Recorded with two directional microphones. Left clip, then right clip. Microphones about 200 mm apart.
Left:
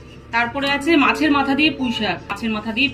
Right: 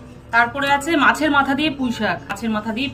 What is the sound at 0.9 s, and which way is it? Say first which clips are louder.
A woman's voice: left 3 dB; 55° right (ahead or behind).